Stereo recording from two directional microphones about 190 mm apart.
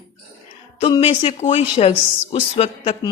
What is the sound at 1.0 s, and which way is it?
A man's voice, 35° left (ahead or behind).